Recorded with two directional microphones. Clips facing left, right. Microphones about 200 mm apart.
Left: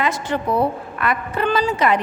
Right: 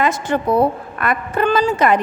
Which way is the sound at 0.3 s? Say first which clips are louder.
Right 4 dB; 50° right (ahead or behind).